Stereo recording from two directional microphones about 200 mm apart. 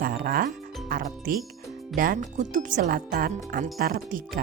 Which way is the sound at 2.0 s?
40° right (ahead or behind).